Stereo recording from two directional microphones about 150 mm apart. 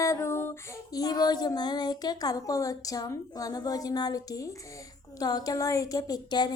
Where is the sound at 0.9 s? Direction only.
25° left (ahead or behind).